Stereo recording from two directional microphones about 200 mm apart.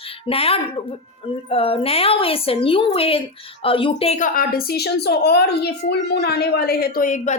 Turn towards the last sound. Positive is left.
turn(degrees=40)  # may be behind; listen again after turning